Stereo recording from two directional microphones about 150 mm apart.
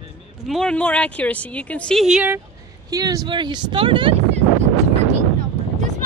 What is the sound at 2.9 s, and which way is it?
Speech, 25° right (ahead or behind).